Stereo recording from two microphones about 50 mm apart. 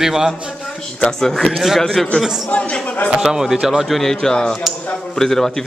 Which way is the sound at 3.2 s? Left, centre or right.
Centre.